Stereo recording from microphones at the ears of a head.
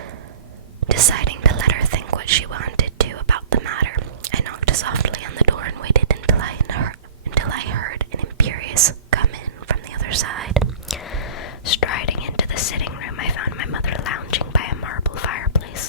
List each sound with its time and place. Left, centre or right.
0.8 s whispering: right
11.1 s whispering: left